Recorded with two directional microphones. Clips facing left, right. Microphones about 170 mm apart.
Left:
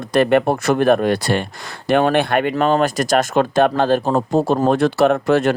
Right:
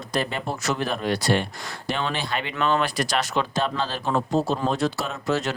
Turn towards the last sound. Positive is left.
turn(degrees=55)  # may be behind; listen again after turning